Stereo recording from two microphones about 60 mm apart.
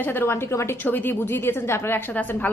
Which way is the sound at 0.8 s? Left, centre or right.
Left.